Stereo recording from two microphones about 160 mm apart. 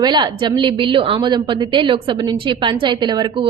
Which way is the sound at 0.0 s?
25° right (ahead or behind).